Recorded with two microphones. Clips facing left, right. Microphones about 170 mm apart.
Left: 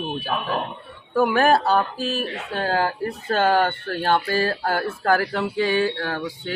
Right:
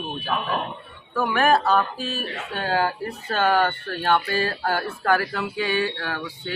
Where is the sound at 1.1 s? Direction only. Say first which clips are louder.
Left 3 dB; 30° left (ahead or behind).